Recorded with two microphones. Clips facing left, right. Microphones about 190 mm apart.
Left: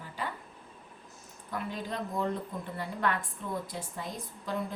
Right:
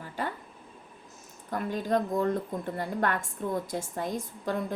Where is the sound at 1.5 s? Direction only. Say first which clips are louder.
Right 8 dB; 45° right (ahead or behind).